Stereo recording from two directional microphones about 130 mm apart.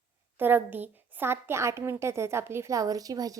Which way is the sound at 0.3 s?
15° right (ahead or behind).